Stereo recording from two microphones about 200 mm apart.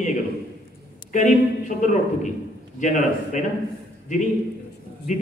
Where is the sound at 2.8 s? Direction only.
40° left (ahead or behind).